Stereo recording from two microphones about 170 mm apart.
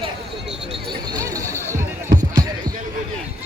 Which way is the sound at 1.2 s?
20° right (ahead or behind).